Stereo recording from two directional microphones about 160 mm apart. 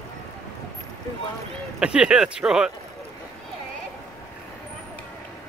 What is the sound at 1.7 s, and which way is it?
Speech, 5° right (ahead or behind).